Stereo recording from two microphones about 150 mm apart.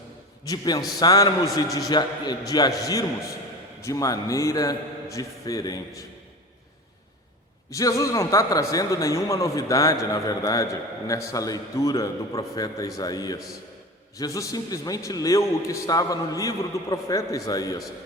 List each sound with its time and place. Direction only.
0.4 s a man's voice: 25° left (ahead or behind)
7.7 s a man's voice: 20° left (ahead or behind)